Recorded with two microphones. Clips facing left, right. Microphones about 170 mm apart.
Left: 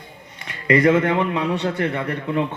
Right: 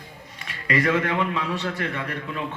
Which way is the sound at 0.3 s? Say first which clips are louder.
Left 7 dB; 20° left (ahead or behind).